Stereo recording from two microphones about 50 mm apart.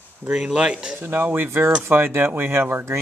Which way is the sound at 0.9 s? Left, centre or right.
Right.